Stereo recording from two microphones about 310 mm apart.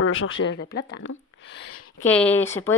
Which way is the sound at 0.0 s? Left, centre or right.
Left.